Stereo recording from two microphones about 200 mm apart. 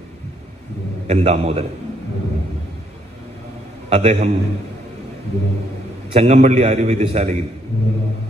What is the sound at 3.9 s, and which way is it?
Speech, 30° right (ahead or behind).